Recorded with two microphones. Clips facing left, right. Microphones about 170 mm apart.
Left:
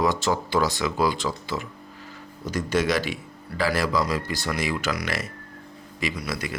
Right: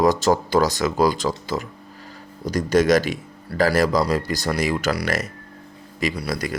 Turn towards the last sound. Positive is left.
turn(degrees=-40)  # may be behind; listen again after turning